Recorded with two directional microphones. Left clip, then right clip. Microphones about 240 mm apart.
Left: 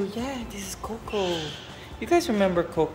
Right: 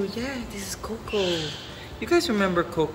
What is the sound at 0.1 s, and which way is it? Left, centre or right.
Speech, centre.